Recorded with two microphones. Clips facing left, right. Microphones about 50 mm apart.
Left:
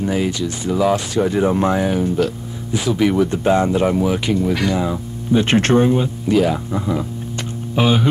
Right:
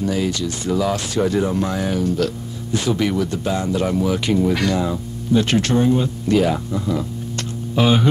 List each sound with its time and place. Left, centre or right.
0.0 s speech: left
3.3 s speech: left
4.3 s speech: centre
4.7 s speech: centre
5.4 s speech: left
5.9 s speech: centre
6.3 s speech: centre
6.7 s speech: centre
7.8 s speech: centre